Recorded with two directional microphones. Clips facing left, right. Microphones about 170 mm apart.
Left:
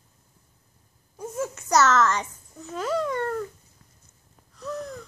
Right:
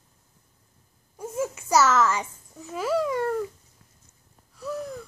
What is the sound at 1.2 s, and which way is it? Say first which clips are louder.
Babbling: right 1 dB; 10° right (ahead or behind).